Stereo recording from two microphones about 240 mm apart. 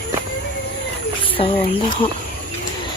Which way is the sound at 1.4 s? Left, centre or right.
Left.